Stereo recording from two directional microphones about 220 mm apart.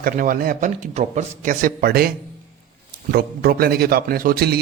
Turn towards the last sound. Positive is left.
turn(degrees=-45)  # may be behind; listen again after turning